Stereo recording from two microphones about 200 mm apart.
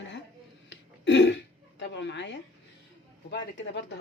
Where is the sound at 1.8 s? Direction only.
60° left (ahead or behind).